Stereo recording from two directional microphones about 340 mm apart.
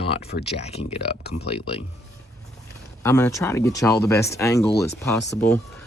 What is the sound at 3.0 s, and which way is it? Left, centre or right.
Speech, centre.